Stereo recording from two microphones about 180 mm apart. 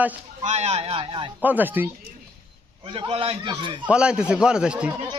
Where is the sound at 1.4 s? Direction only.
10° right (ahead or behind).